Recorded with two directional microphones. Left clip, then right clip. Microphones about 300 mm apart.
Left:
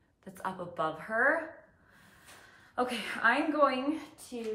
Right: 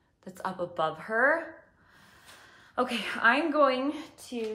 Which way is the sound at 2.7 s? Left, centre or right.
Centre.